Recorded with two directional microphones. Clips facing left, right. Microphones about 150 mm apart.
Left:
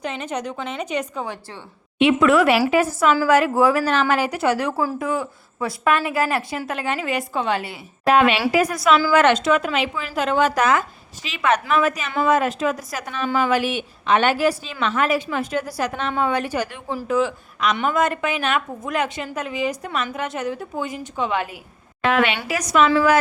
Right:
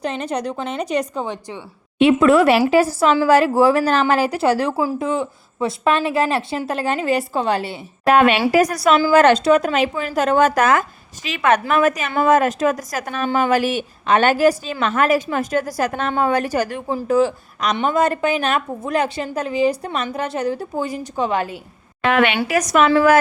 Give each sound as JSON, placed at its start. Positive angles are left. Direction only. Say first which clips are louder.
{"t": 0.0, "sound": "speech", "louder": "right 4 dB", "side_deg": -35}
{"t": 1.2, "sound": "a woman's voice", "louder": "right 4 dB", "side_deg": -20}
{"t": 2.0, "sound": "speech", "louder": "right 3 dB", "side_deg": -35}
{"t": 4.8, "sound": "a woman's voice", "louder": "right 3 dB", "side_deg": -20}
{"t": 8.0, "sound": "a woman's voice", "louder": "right 2 dB", "side_deg": -50}
{"t": 22.0, "sound": "a woman's voice", "louder": "right 3 dB", "side_deg": -60}